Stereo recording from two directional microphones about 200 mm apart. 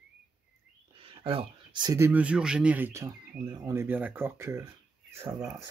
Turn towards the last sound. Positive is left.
turn(degrees=-15)  # may be behind; listen again after turning